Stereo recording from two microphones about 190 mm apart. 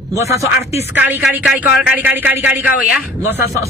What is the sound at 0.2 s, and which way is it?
Speech, 15° right (ahead or behind).